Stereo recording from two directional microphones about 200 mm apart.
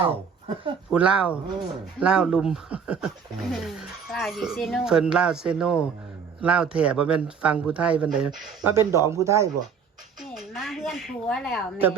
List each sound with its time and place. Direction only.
0.1 s speech: 30° right (ahead or behind)
0.9 s speech: 5° right (ahead or behind)
10.3 s speech: centre (ahead or behind)